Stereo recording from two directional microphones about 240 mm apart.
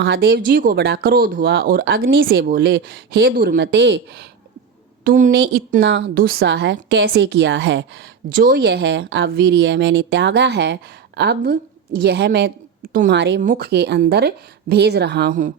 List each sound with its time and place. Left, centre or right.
0.0 s speech: right
5.0 s a woman's voice: right
8.3 s a woman's voice: right